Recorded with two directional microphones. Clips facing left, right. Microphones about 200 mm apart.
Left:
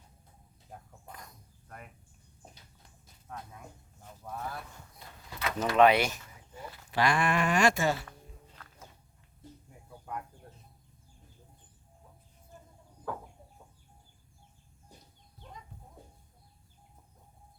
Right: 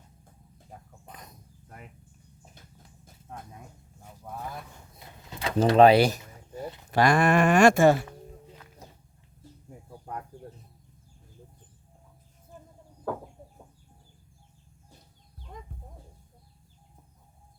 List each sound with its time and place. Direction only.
0.7 s a sound: centre (ahead or behind)
1.0 s insect: 20° right (ahead or behind)
4.0 s a sound: 15° right (ahead or behind)
5.4 s door: 30° right (ahead or behind)
6.9 s speech: 45° right (ahead or behind)
10.1 s chicken: 35° right (ahead or behind)
15.4 s bird: 60° left (ahead or behind)